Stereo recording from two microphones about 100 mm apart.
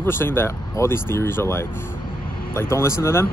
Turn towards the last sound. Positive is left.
turn(degrees=25)  # may be behind; listen again after turning